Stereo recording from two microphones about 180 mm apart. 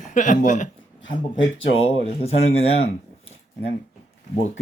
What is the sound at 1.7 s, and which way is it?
Speech, 35° left (ahead or behind).